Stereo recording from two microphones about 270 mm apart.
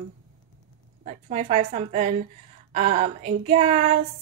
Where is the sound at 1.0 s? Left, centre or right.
Right.